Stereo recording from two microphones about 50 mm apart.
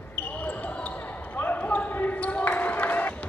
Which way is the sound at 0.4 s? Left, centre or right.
Left.